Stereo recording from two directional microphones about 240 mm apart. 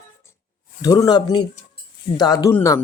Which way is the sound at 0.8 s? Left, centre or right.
Centre.